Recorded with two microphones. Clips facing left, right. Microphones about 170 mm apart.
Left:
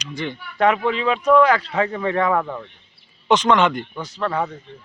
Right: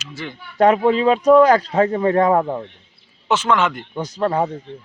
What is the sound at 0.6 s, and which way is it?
Speech, 40° right (ahead or behind).